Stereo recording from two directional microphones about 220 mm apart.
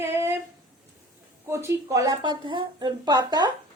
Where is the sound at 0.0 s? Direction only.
10° right (ahead or behind).